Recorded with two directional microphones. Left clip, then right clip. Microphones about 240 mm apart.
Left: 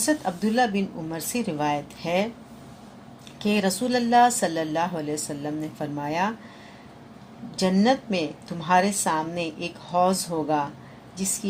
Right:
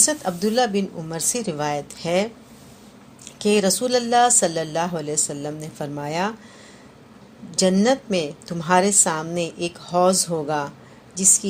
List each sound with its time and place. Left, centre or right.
0.0 s a woman's voice: right
3.3 s a woman's voice: right
7.5 s a woman's voice: right